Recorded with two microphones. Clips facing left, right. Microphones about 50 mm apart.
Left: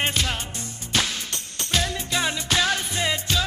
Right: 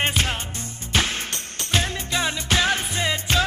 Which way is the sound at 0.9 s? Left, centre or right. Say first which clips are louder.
Right 2 dB; right.